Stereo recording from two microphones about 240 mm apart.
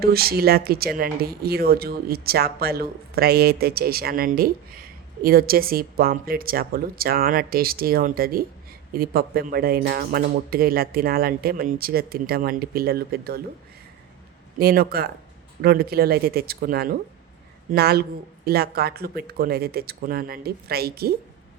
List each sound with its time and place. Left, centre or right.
0.0 s speech: right
14.6 s speech: right